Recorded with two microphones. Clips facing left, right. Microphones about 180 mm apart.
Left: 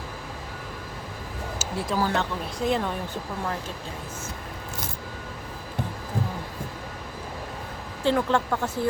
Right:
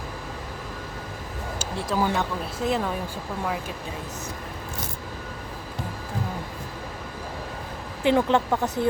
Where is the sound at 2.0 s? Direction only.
15° right (ahead or behind).